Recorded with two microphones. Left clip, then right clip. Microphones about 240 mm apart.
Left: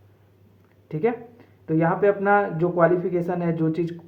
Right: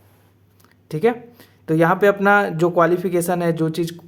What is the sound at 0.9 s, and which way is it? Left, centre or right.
Speech, right.